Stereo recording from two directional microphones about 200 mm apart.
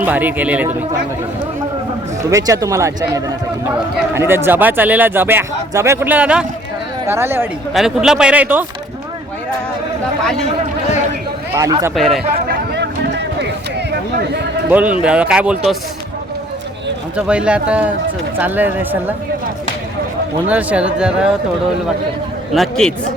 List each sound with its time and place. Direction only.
0.0 s speech: 10° right (ahead or behind)
2.3 s speech: 15° right (ahead or behind)
7.7 s speech: centre (ahead or behind)
11.5 s speech: 15° right (ahead or behind)
11.9 s speech: centre (ahead or behind)
12.5 s a sound: 60° right (ahead or behind)
14.7 s speech: 10° right (ahead or behind)
17.2 s speech: 5° right (ahead or behind)
20.5 s speech: 5° right (ahead or behind)
22.5 s speech: centre (ahead or behind)